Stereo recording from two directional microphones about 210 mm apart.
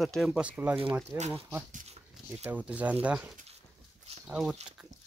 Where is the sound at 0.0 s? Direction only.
Centre (ahead or behind).